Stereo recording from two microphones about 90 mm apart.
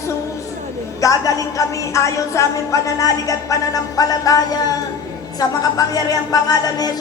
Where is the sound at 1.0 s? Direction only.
40° left (ahead or behind).